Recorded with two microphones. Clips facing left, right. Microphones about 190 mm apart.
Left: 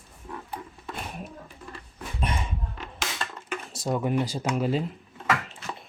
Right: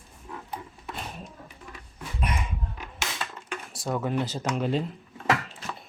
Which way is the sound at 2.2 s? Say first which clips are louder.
Left 1 dB; 30° left (ahead or behind).